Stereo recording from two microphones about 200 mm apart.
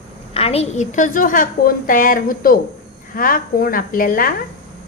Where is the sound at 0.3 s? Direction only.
30° left (ahead or behind).